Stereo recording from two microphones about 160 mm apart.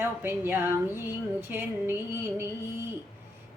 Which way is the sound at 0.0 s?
15° right (ahead or behind).